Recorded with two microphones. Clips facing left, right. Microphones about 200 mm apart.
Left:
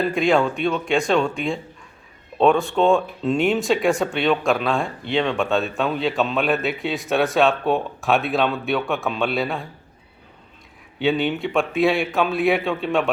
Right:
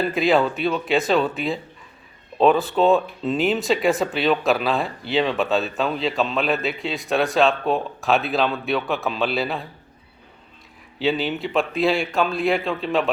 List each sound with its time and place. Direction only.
0.0 s speech: centre (ahead or behind)
11.0 s speech: centre (ahead or behind)